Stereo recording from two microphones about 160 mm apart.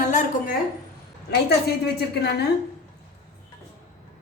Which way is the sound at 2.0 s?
90° left.